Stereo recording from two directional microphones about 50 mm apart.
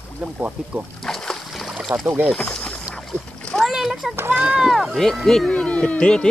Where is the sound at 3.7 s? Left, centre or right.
Centre.